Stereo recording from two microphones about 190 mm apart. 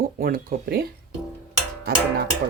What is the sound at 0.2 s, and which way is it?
Speech, 50° right (ahead or behind).